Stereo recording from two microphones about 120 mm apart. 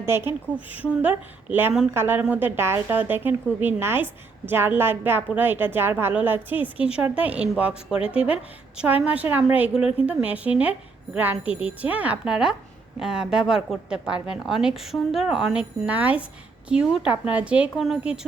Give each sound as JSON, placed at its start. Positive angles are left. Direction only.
{"t": 0.0, "sound": "a woman's voice", "side_deg": -20}